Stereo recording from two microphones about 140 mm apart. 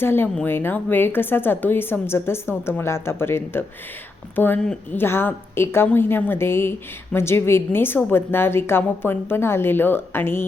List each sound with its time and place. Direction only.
0.0 s a woman's voice: 15° left (ahead or behind)